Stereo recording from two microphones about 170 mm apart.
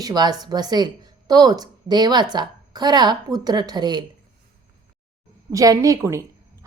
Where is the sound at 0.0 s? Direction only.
25° right (ahead or behind).